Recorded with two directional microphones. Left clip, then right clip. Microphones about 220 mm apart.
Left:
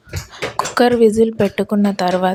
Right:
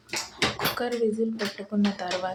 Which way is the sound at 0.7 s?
45° left (ahead or behind).